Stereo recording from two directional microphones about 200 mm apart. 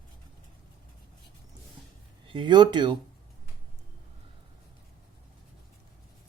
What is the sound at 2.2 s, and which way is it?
Speech, 25° right (ahead or behind).